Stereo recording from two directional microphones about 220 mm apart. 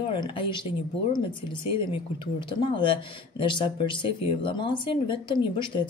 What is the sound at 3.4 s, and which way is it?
Speech, 20° left (ahead or behind).